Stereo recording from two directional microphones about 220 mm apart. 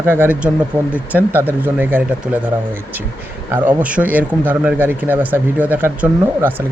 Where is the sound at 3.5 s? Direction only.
5° right (ahead or behind).